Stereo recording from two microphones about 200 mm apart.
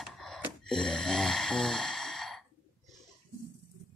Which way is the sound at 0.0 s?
Centre (ahead or behind).